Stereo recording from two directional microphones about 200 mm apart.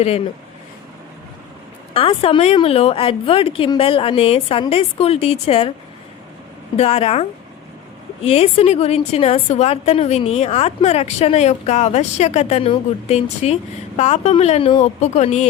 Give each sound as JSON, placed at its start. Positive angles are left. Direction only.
{"t": 1.9, "sound": "a woman's voice", "side_deg": 30}
{"t": 6.7, "sound": "a woman's voice", "side_deg": 30}